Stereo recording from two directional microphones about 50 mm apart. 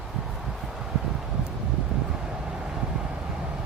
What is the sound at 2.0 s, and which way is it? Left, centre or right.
Vehicle, centre.